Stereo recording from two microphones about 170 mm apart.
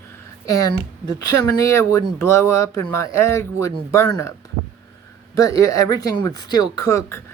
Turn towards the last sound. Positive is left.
turn(degrees=15)  # may be behind; listen again after turning